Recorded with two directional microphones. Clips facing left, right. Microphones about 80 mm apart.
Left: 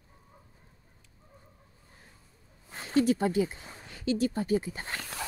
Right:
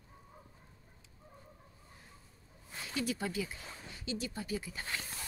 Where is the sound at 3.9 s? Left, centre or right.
Left.